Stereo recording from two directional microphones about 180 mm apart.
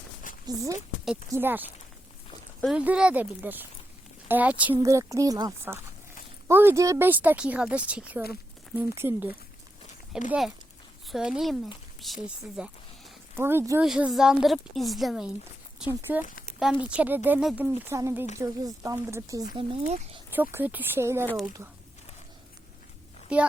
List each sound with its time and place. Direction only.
0.4 s speech: 20° right (ahead or behind)
2.7 s speech: 5° right (ahead or behind)
13.3 s speech: 15° right (ahead or behind)
15.8 s speech: 10° right (ahead or behind)
19.5 s speech: 30° right (ahead or behind)
20.3 s speech: 10° right (ahead or behind)
23.3 s speech: 5° right (ahead or behind)